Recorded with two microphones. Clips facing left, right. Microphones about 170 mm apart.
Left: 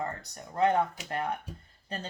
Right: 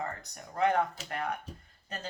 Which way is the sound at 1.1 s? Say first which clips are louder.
Left 4 dB; 30° left (ahead or behind).